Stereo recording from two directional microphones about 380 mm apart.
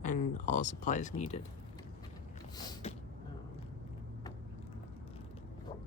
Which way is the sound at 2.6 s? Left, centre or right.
Centre.